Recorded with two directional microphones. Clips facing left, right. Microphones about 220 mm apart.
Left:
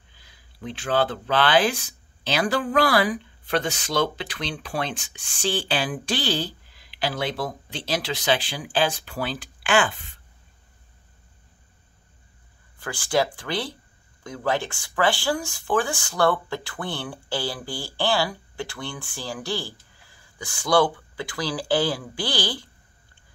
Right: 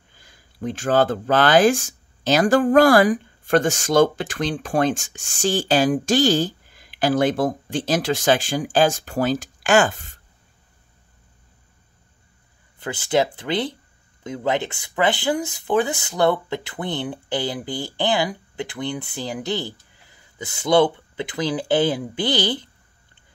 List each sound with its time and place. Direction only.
0.1 s speech: 45° right (ahead or behind)
12.7 s speech: 25° right (ahead or behind)